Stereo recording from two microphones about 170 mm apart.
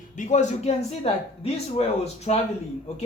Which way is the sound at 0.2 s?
45° left (ahead or behind).